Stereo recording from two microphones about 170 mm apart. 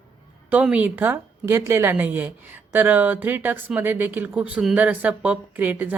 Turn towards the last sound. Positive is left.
turn(degrees=-10)  # may be behind; listen again after turning